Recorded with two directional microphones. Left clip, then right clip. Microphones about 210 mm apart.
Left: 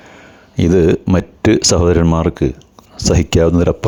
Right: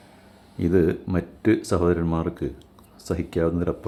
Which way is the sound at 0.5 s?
45° left (ahead or behind).